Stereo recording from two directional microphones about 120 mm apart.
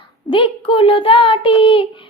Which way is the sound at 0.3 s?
50° left (ahead or behind).